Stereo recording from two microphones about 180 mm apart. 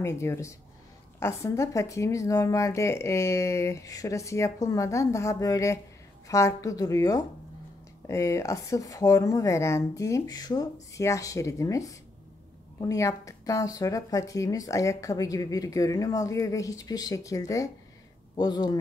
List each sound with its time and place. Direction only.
0.0 s speech: 15° left (ahead or behind)
12.8 s speech: 15° left (ahead or behind)